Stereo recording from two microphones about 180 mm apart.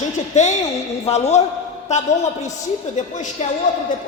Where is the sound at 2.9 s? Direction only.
40° left (ahead or behind).